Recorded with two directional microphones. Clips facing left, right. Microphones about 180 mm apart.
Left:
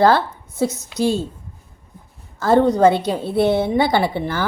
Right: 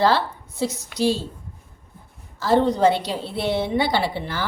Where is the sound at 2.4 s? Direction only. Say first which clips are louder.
Left 4 dB; 50° left (ahead or behind).